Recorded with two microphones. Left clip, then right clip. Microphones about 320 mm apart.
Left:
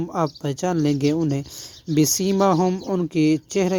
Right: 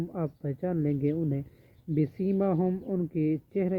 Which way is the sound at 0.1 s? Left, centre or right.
Left.